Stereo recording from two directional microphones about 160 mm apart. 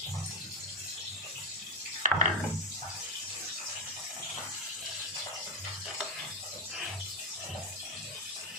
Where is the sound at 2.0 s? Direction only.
50° right (ahead or behind).